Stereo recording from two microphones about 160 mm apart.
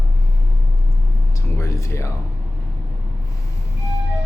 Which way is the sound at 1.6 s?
20° left (ahead or behind).